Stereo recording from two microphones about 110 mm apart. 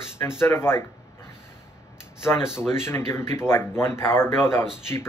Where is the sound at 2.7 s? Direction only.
20° left (ahead or behind).